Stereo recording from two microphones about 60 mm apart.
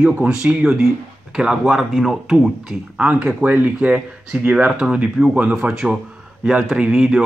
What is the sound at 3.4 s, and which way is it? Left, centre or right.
Speech, right.